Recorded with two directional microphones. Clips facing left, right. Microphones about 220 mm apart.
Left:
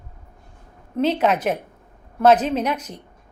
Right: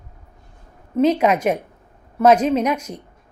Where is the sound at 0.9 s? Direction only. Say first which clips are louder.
Right 3 dB; 10° right (ahead or behind).